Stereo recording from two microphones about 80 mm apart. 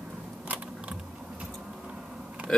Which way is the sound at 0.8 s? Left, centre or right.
Centre.